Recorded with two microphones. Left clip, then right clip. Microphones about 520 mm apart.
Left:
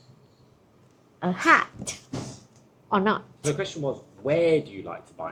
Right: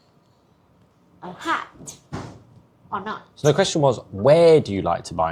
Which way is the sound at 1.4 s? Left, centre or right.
Left.